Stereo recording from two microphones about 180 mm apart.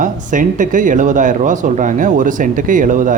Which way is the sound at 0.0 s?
45° right (ahead or behind).